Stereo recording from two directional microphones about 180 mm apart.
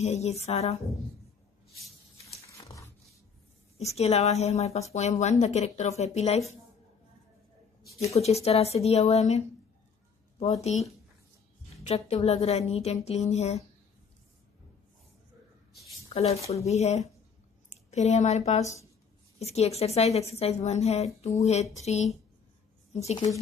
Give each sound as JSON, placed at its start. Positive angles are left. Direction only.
{"t": 0.0, "sound": "speech", "side_deg": 35}
{"t": 2.4, "sound": "a sound", "side_deg": 15}
{"t": 3.7, "sound": "speech", "side_deg": 35}
{"t": 8.1, "sound": "speech", "side_deg": 35}
{"t": 10.4, "sound": "speech", "side_deg": 35}
{"t": 16.1, "sound": "speech", "side_deg": 35}